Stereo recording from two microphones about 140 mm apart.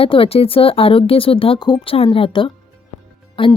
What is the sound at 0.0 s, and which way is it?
Speech, 40° left (ahead or behind).